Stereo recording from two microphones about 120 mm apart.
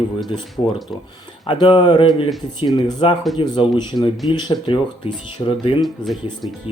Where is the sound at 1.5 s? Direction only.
45° left (ahead or behind).